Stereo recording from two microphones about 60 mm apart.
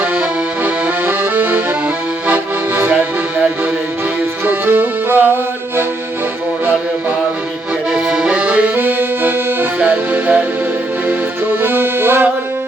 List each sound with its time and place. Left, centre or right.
0.0 s accordion: right
4.4 s music: right
7.9 s accordion: centre; by 9.6 s right
9.8 s music: right
11.6 s accordion: right